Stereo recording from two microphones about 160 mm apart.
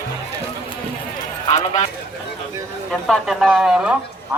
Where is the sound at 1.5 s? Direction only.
40° left (ahead or behind).